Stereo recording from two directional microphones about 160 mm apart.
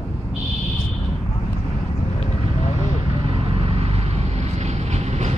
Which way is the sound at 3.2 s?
35° right (ahead or behind).